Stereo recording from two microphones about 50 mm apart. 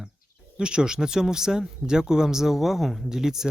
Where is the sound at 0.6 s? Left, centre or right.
Centre.